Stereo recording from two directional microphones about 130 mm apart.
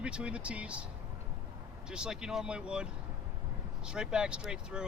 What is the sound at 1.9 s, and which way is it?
Speech, 5° right (ahead or behind).